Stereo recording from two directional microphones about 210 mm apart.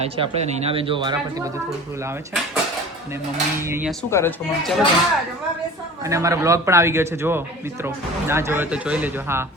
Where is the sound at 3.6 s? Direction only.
10° right (ahead or behind).